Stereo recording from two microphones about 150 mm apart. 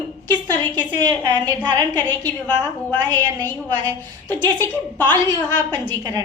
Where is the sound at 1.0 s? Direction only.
30° right (ahead or behind).